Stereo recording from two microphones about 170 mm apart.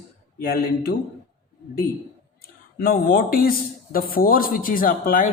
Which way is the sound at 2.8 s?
55° left (ahead or behind).